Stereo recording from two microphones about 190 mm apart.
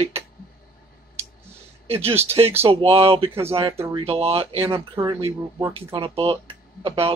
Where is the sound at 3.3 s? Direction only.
10° right (ahead or behind).